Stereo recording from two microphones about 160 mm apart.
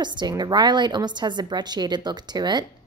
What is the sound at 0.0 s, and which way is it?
A woman's voice, 30° right (ahead or behind).